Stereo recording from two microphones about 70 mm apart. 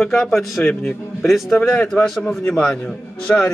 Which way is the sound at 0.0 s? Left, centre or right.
Centre.